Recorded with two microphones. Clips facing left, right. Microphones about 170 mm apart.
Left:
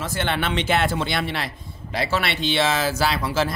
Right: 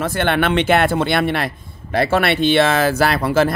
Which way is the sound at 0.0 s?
60° right (ahead or behind).